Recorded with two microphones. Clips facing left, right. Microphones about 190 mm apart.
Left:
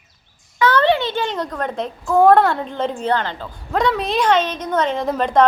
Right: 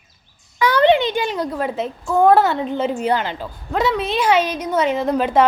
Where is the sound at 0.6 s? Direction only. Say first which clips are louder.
Right 2 dB; 15° right (ahead or behind).